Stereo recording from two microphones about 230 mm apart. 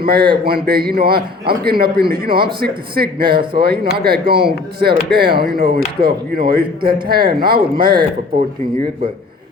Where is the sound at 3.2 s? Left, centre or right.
Right.